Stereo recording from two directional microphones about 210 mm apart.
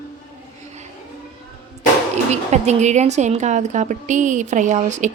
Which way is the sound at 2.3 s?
30° right (ahead or behind).